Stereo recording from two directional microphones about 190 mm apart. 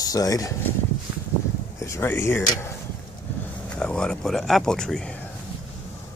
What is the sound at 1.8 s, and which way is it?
Speech, 15° left (ahead or behind).